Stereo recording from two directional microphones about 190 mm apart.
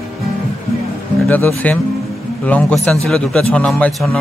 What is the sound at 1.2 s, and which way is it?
A man's voice, 10° left (ahead or behind).